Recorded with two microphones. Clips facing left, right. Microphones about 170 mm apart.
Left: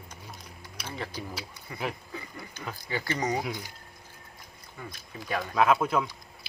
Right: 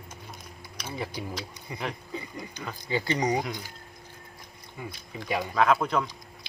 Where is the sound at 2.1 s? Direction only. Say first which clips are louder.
Right 4 dB; 15° right (ahead or behind).